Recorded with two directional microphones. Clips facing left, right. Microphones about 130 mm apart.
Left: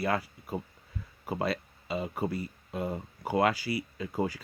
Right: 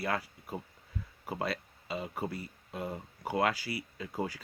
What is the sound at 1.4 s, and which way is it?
Speech, 15° left (ahead or behind).